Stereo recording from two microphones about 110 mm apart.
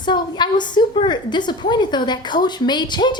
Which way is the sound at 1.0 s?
45° left (ahead or behind).